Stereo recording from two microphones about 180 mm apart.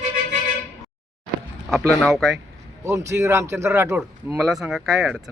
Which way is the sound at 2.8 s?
15° right (ahead or behind).